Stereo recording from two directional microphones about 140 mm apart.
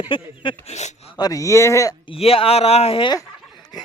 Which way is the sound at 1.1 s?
25° left (ahead or behind).